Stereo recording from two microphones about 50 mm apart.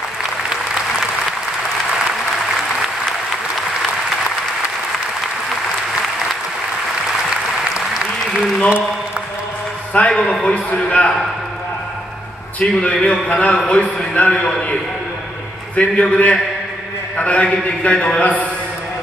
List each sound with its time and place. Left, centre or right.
8.0 s applause: centre
9.9 s a man's voice: centre
10.5 s a man's voice: left
12.5 s a man's voice: left